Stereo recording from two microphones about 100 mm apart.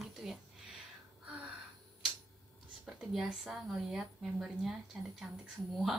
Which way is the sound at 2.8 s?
5° right (ahead or behind).